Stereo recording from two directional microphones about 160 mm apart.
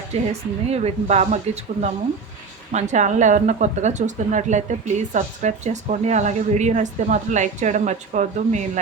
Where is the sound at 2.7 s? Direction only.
45° right (ahead or behind).